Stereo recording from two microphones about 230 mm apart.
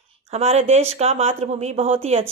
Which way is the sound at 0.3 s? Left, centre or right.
Right.